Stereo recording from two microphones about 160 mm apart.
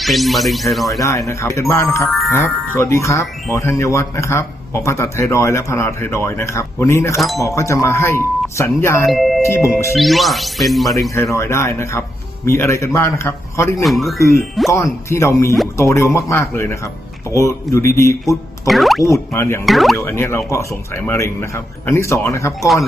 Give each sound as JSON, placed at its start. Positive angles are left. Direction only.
{"t": 0.0, "sound": "speech", "side_deg": 0}
{"t": 0.9, "sound": "speech", "side_deg": 20}
{"t": 9.0, "sound": "speech", "side_deg": 0}
{"t": 11.1, "sound": "speech", "side_deg": 20}
{"t": 13.8, "sound": "speech", "side_deg": 0}
{"t": 14.2, "sound": "speech", "side_deg": 20}
{"t": 18.7, "sound": "speech", "side_deg": 0}
{"t": 19.0, "sound": "speech", "side_deg": 15}
{"t": 19.6, "sound": "speech", "side_deg": 0}
{"t": 20.0, "sound": "speech", "side_deg": 15}
{"t": 22.6, "sound": "speech", "side_deg": 0}